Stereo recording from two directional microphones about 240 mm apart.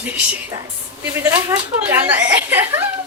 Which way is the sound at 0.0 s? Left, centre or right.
Centre.